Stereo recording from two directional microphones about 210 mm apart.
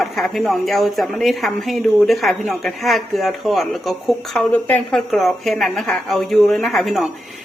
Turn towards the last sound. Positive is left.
turn(degrees=0)  # may be behind; listen again after turning